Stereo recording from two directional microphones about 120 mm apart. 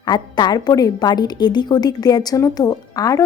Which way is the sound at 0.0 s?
35° left (ahead or behind).